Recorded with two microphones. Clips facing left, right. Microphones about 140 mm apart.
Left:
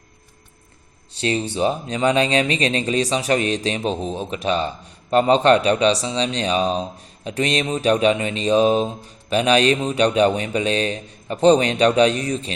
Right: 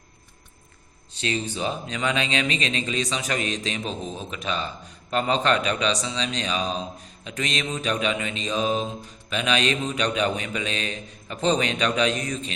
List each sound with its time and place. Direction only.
1.1 s speech: 35° left (ahead or behind)